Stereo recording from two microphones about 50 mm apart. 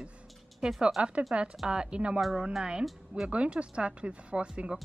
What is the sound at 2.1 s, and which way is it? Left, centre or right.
Speech, centre.